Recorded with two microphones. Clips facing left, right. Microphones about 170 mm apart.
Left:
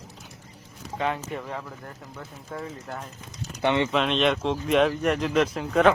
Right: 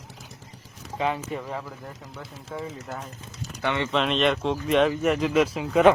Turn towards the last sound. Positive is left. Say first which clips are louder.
# right 1 dB
turn(degrees=-5)  # may be behind; listen again after turning